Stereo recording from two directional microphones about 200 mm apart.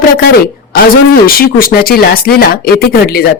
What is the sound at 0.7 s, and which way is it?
Speech, 50° left (ahead or behind).